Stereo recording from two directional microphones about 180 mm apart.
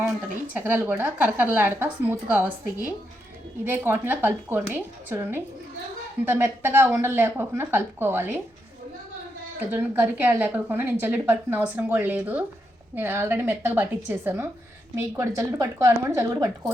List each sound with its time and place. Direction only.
0.5 s speech: 10° right (ahead or behind)
3.6 s speech: 10° right (ahead or behind)
9.6 s speech: 10° right (ahead or behind)